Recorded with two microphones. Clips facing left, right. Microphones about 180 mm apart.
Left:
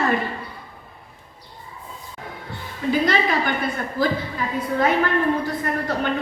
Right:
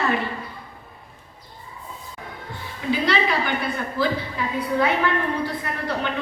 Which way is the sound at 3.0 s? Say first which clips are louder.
Left 1 dB; 45° left (ahead or behind).